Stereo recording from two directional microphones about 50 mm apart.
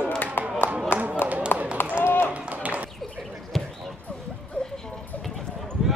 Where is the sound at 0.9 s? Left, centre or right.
Left.